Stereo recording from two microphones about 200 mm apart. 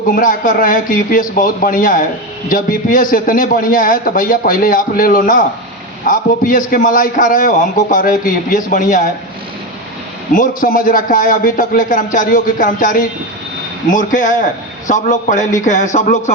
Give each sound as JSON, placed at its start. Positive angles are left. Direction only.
{"t": 0.2, "sound": "a man's voice", "side_deg": 40}
{"t": 10.3, "sound": "a man's voice", "side_deg": 40}